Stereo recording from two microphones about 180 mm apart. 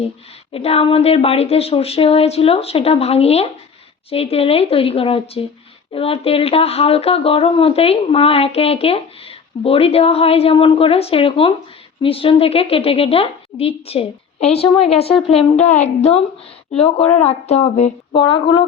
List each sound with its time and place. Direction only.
0.5 s speech: 35° left (ahead or behind)
18.2 s speech: 25° left (ahead or behind)